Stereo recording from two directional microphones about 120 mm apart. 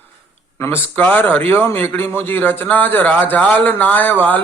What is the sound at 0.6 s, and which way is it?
A man's voice, 15° left (ahead or behind).